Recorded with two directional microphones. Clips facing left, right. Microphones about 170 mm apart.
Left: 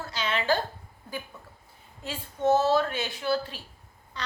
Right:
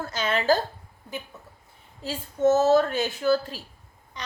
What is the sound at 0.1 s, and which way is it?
Speech, 45° right (ahead or behind).